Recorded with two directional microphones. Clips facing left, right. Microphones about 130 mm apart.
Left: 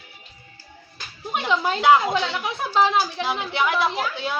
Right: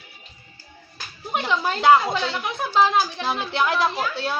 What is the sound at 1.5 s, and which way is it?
A woman's voice, 10° left (ahead or behind).